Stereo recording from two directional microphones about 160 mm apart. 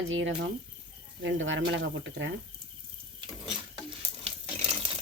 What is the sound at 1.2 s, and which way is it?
Speech, 90° right.